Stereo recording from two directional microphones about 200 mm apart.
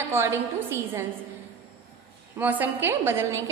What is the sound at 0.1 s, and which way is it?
Speech, 10° right (ahead or behind).